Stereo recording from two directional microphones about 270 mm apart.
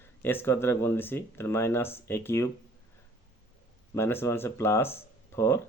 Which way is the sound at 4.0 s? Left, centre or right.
Centre.